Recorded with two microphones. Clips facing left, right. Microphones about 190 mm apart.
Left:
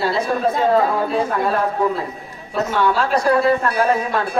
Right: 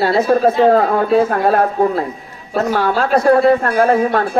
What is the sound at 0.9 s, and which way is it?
Speech, 60° right (ahead or behind).